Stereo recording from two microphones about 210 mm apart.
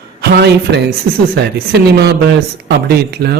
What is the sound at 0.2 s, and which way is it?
A woman's voice, 55° right (ahead or behind).